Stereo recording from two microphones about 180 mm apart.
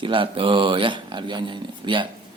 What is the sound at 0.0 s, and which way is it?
Speech, 30° right (ahead or behind).